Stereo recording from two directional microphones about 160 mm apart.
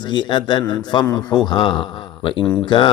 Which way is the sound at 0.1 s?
30° left (ahead or behind).